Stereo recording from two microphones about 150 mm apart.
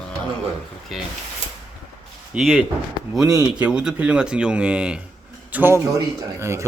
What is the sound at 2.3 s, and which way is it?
A man's voice, centre (ahead or behind).